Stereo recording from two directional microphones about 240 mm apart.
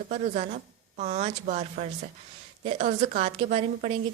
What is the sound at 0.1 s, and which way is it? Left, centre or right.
Speech, right.